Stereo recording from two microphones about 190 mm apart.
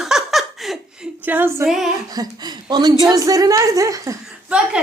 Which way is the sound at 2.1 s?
20° right (ahead or behind).